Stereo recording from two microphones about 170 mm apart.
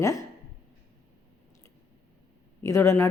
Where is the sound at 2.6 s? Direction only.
15° left (ahead or behind).